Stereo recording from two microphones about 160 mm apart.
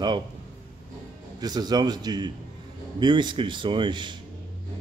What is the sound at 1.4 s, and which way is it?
A man's voice, 25° right (ahead or behind).